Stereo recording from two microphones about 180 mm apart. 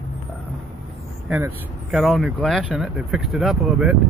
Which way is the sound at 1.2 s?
10° right (ahead or behind).